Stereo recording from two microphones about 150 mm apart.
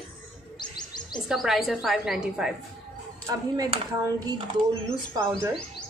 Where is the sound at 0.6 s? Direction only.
30° left (ahead or behind).